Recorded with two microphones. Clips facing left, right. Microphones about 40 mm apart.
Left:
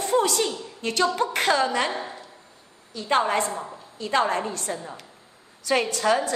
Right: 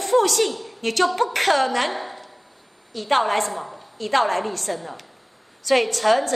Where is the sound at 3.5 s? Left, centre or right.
Centre.